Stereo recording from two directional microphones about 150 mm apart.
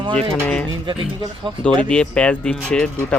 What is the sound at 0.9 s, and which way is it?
Speech, 30° right (ahead or behind).